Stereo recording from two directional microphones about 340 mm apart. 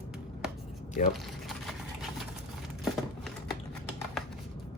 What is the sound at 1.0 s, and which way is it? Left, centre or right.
Speech, left.